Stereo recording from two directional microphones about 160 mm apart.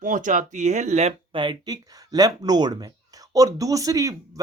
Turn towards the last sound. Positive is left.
turn(degrees=-20)  # may be behind; listen again after turning